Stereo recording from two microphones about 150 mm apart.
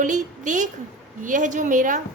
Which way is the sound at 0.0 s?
55° right (ahead or behind).